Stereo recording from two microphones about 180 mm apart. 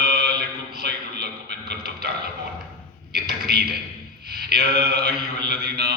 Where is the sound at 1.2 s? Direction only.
65° right (ahead or behind).